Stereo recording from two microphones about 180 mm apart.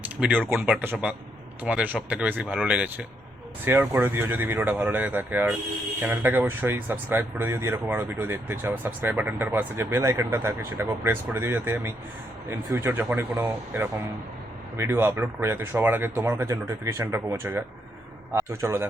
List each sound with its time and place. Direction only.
0.0 s speech: 5° right (ahead or behind)